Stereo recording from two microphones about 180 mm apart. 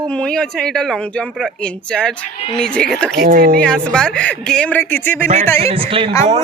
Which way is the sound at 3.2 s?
55° right (ahead or behind).